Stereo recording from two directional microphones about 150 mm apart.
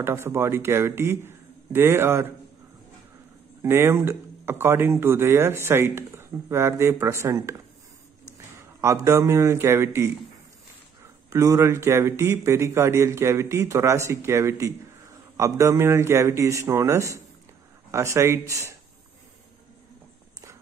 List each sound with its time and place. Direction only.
0.0 s speech: 15° right (ahead or behind)
3.6 s speech: 15° right (ahead or behind)
8.8 s speech: 20° right (ahead or behind)
11.2 s speech: 20° right (ahead or behind)